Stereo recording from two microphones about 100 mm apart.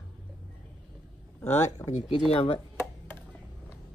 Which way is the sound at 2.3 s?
70° left (ahead or behind).